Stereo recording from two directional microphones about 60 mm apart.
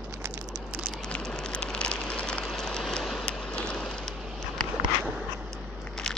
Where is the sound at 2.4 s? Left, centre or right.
Centre.